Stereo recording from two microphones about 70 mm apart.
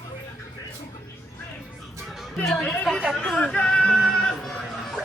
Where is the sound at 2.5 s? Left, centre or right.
Centre.